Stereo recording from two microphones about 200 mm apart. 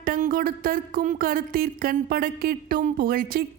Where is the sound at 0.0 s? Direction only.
45° right (ahead or behind).